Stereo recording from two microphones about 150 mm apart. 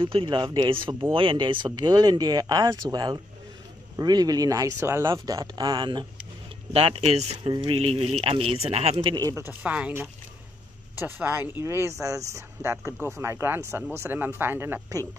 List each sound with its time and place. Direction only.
0.0 s speech: 35° right (ahead or behind)
6.7 s speech: 40° right (ahead or behind)
8.9 s speech: 30° right (ahead or behind)
9.3 s speech: 15° right (ahead or behind)